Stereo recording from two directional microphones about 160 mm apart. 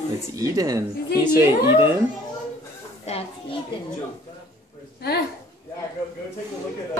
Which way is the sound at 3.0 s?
40° left (ahead or behind).